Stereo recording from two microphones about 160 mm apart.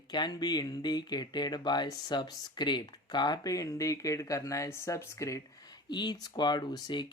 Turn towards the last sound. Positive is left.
turn(degrees=25)  # may be behind; listen again after turning